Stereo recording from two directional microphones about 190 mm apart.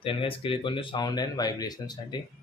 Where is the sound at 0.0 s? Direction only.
30° left (ahead or behind).